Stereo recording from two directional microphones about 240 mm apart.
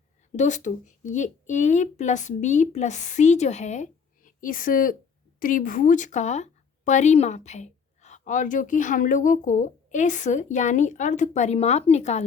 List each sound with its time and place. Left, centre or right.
0.3 s speech: left